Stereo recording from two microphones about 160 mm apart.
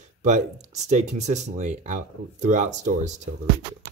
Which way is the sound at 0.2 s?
50° right (ahead or behind).